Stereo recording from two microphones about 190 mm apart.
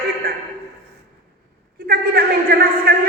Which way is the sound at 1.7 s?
50° right (ahead or behind).